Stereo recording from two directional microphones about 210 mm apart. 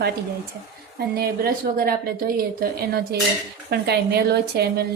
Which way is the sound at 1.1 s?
45° right (ahead or behind).